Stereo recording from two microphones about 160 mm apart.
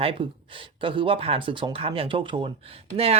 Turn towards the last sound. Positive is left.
turn(degrees=-40)  # may be behind; listen again after turning